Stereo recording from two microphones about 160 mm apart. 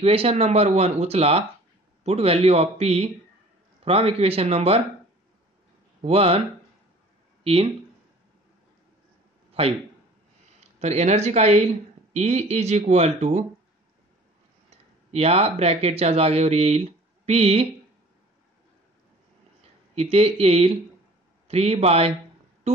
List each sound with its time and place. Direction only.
0.0 s speech: 40° right (ahead or behind)
6.0 s speech: 40° right (ahead or behind)
7.4 s speech: 35° right (ahead or behind)
9.6 s speech: 40° right (ahead or behind)
10.8 s speech: 45° right (ahead or behind)
15.0 s speech: 40° right (ahead or behind)
20.0 s speech: 40° right (ahead or behind)